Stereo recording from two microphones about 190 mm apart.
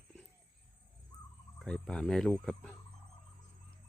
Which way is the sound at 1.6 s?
5° left (ahead or behind).